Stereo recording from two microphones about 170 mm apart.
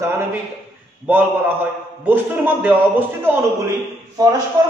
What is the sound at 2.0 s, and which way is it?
A man's voice, 10° right (ahead or behind).